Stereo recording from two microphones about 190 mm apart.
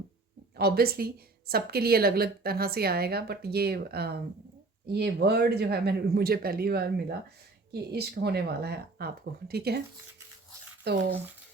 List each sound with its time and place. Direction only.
0.5 s a woman's voice: 55° right (ahead or behind)
10.8 s a woman's voice: 60° right (ahead or behind)